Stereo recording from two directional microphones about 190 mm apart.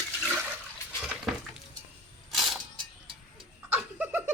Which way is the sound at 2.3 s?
Centre (ahead or behind).